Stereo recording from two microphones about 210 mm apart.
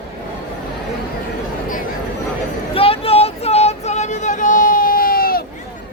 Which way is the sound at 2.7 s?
25° left (ahead or behind).